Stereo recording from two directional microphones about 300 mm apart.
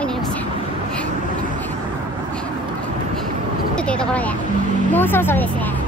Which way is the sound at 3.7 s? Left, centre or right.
Centre.